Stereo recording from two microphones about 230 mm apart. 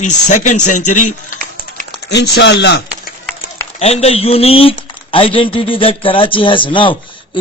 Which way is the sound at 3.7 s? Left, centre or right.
Left.